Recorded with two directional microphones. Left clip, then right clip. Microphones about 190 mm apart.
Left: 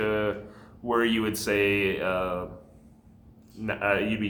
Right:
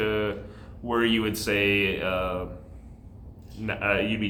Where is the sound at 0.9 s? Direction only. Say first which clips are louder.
Even; 20° left (ahead or behind).